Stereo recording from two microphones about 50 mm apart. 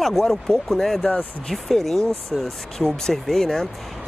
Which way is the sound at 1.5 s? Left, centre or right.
Centre.